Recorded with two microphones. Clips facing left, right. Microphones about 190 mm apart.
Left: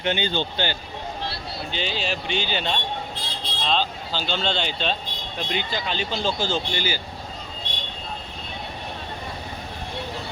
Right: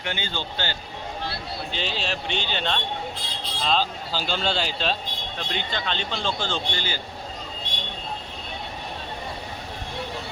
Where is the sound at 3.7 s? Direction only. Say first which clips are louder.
Even; 5° right (ahead or behind); by 7.0 s 10° left (ahead or behind).